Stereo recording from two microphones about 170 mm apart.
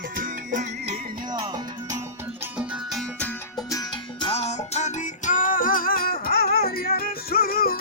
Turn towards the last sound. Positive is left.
turn(degrees=60)  # may be behind; listen again after turning